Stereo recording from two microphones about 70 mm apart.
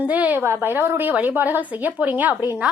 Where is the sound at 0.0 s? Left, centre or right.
Right.